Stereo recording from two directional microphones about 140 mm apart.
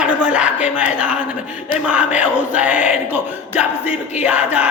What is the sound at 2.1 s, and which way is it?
Music, 10° right (ahead or behind).